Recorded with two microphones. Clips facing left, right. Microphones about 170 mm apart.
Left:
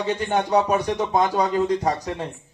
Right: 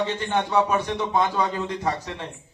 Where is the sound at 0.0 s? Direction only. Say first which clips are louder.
Left 2 dB; 35° left (ahead or behind).